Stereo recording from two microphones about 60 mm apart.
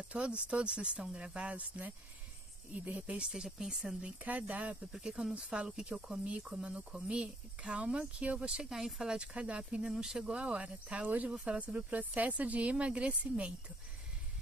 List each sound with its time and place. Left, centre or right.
0.1 s speech: centre
4.2 s speech: right
4.9 s speech: centre